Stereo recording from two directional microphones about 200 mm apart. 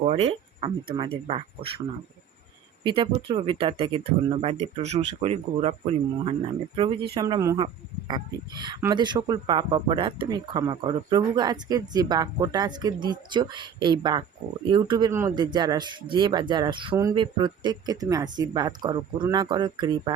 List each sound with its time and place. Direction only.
0.0 s speech: 30° right (ahead or behind)
2.8 s speech: 25° right (ahead or behind)